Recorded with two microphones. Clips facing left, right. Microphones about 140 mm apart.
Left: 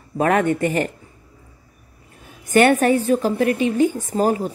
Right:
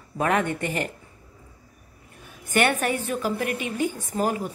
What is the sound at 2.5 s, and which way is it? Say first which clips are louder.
A woman's voice: left 8 dB; 45° left (ahead or behind).